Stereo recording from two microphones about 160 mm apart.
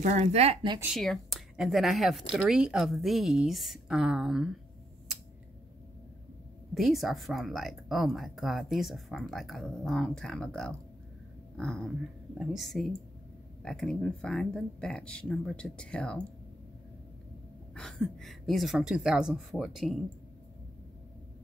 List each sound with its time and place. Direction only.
0.0 s speech: 45° right (ahead or behind)
0.8 s speech: centre (ahead or behind)
6.7 s speech: centre (ahead or behind)
17.7 s speech: centre (ahead or behind)